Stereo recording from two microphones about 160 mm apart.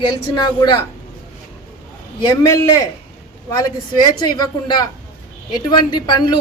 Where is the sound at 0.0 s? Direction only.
25° left (ahead or behind).